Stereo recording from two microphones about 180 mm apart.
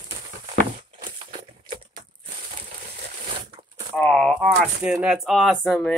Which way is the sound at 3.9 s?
5° left (ahead or behind).